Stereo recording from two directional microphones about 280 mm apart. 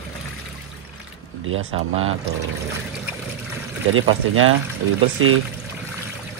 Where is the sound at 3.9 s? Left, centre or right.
Right.